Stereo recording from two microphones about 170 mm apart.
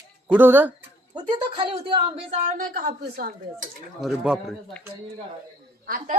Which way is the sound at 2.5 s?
55° right (ahead or behind).